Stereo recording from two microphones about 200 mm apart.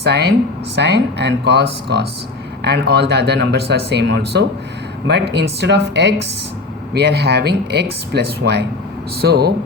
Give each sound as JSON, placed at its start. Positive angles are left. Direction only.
{"t": 0.0, "sound": "speech", "side_deg": -55}